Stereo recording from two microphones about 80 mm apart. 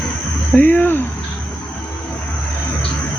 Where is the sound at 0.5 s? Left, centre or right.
Left.